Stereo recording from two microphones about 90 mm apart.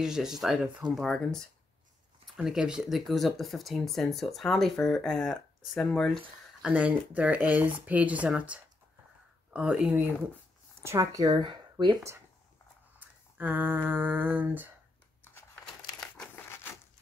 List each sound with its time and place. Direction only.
0.0 s speech: 5° right (ahead or behind)
6.6 s speech: 15° right (ahead or behind)
10.8 s speech: 35° right (ahead or behind)
13.4 s a sound: 20° right (ahead or behind)
15.2 s a sound: 20° left (ahead or behind)
15.6 s crumpling: 5° left (ahead or behind)